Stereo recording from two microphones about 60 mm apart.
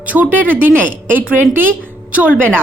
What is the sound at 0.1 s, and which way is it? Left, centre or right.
A woman's voice, right.